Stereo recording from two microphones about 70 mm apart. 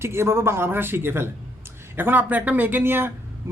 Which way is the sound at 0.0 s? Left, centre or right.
Right.